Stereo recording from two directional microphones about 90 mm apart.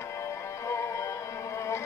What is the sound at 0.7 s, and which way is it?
Music, 35° left (ahead or behind).